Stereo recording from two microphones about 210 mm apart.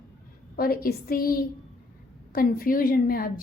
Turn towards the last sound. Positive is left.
turn(degrees=45)  # may be behind; listen again after turning